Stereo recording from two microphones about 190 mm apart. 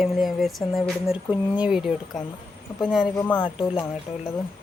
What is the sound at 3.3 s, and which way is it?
Speech, 25° left (ahead or behind).